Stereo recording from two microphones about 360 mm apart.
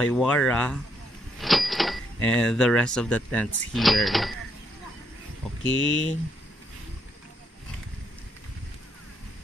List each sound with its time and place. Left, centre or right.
0.0 s speech: centre
1.4 s cash register: centre
2.2 s speech: centre
5.6 s speech: left